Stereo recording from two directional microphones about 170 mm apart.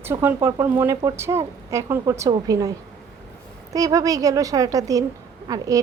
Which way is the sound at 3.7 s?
20° right (ahead or behind).